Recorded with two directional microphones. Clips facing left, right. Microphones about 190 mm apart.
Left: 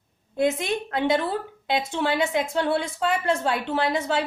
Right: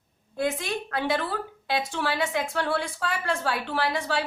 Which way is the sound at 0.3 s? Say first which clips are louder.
Left 5 dB; 20° left (ahead or behind).